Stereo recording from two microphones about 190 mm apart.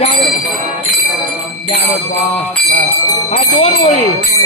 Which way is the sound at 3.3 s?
35° left (ahead or behind).